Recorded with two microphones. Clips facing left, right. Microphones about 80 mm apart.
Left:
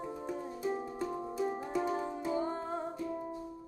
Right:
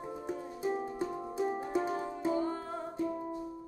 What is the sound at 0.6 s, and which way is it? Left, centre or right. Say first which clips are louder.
Music: right 2 dB; right.